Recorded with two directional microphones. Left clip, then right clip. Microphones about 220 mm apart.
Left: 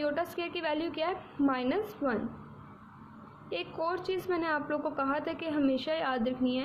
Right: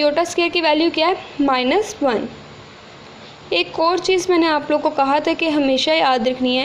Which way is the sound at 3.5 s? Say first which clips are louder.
Right 16 dB; 25° right (ahead or behind).